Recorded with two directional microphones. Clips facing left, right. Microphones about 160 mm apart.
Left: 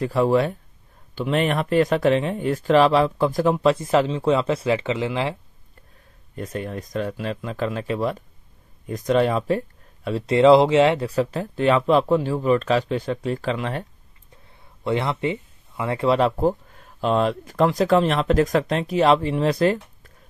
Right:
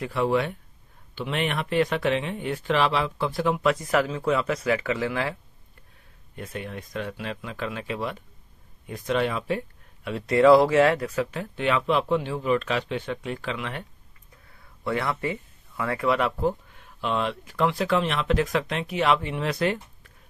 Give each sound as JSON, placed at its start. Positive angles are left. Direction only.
{"t": 0.0, "sound": "speech", "side_deg": 40}
{"t": 6.3, "sound": "speech", "side_deg": 40}
{"t": 14.5, "sound": "speech", "side_deg": 25}